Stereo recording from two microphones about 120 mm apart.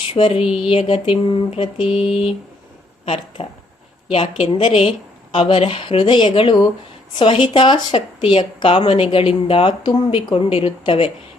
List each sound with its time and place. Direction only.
0.1 s speech: 50° left (ahead or behind)
3.4 s speech: 50° left (ahead or behind)